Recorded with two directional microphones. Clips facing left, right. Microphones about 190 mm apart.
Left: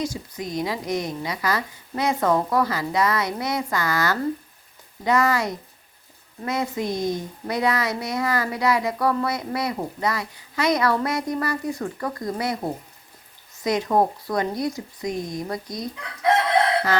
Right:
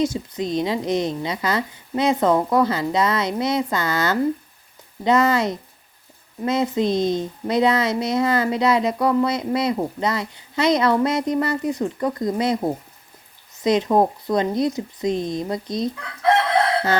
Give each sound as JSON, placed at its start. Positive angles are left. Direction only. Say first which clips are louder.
{"t": 0.0, "sound": "speech", "louder": "right 6 dB", "side_deg": -25}
{"t": 13.7, "sound": "speech", "louder": "right 3 dB", "side_deg": -20}